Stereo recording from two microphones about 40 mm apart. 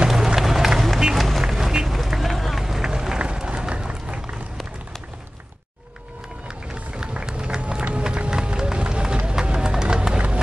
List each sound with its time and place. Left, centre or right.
0.1 s run: centre
1.5 s run: centre
3.2 s music: right
6.4 s run: centre
9.6 s music: centre